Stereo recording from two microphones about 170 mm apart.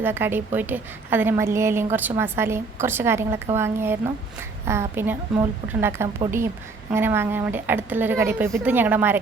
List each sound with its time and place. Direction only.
0.0 s a woman's voice: 10° right (ahead or behind)